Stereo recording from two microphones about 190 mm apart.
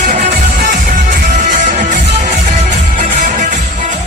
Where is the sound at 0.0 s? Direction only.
45° right (ahead or behind).